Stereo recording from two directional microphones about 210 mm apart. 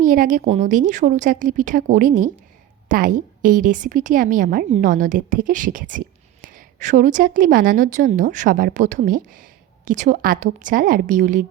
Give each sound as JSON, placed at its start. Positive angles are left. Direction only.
{"t": 0.0, "sound": "a woman's voice", "side_deg": -40}